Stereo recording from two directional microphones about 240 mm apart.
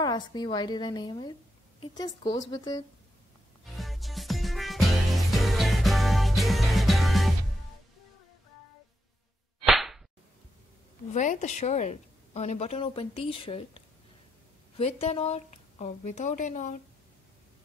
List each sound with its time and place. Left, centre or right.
0.0 s a woman's voice: centre
3.7 s music: centre
9.7 s whip: centre
11.1 s a woman's voice: left